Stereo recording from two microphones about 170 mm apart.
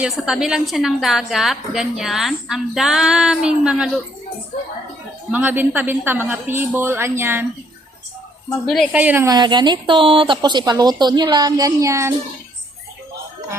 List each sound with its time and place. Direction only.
0.0 s a woman's voice: centre (ahead or behind)
5.3 s a woman's voice: 10° right (ahead or behind)
8.6 s a woman's voice: centre (ahead or behind)
9.0 s a woman's voice: 10° right (ahead or behind)
9.3 s speech: 25° right (ahead or behind)